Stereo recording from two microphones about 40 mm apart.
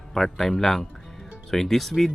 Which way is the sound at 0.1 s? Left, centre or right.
Centre.